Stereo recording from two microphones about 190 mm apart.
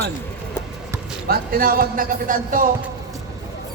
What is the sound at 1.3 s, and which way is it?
Speech, 50° right (ahead or behind).